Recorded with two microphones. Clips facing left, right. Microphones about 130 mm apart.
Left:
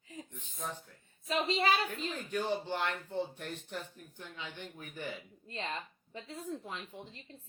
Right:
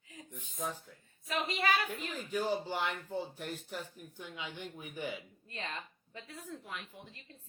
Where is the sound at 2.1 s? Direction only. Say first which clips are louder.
Right 2 dB; 5° right (ahead or behind).